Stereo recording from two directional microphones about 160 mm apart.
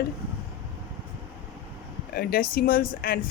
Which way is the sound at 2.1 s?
65° left (ahead or behind).